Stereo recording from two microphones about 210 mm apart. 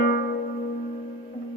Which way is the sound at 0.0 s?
50° left (ahead or behind).